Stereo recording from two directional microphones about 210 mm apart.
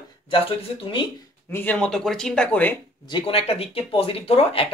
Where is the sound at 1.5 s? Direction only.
5° left (ahead or behind).